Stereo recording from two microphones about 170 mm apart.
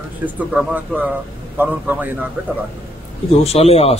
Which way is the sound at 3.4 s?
40° left (ahead or behind).